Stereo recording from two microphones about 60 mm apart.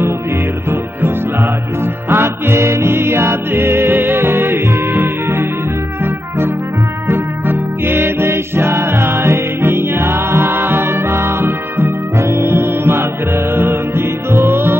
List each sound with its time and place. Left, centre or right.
2.0 s music: right
7.1 s music: right